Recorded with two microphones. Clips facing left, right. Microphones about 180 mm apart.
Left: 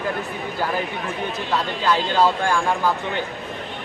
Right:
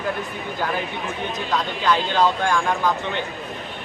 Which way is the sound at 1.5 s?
10° left (ahead or behind).